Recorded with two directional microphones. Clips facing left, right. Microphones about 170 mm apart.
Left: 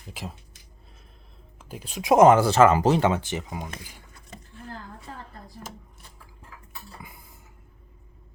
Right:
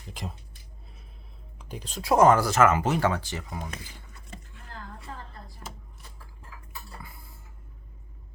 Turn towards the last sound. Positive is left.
turn(degrees=15)  # may be behind; listen again after turning